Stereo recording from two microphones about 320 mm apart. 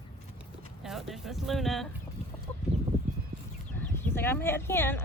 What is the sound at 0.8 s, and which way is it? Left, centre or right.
Speech, centre.